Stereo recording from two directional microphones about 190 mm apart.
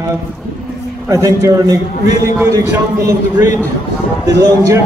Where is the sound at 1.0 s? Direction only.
15° right (ahead or behind).